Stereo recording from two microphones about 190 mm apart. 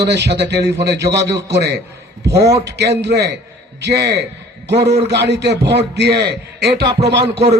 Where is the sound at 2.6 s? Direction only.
60° right (ahead or behind).